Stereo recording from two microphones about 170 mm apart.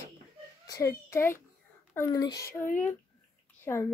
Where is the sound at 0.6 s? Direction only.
20° left (ahead or behind).